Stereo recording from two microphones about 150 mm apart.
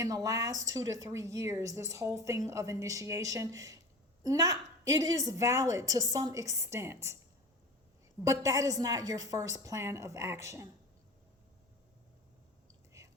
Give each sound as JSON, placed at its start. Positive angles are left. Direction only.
{"t": 0.0, "sound": "speech", "side_deg": -25}
{"t": 8.2, "sound": "speech", "side_deg": -25}